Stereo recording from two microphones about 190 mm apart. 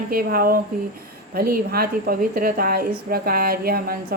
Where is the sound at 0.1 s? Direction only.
50° right (ahead or behind).